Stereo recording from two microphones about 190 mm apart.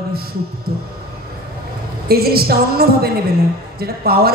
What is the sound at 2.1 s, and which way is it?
A man's voice, 55° right (ahead or behind).